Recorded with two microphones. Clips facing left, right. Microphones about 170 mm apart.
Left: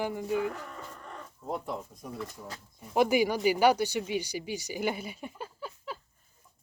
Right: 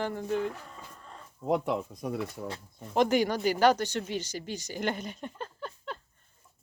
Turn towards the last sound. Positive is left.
turn(degrees=5)  # may be behind; listen again after turning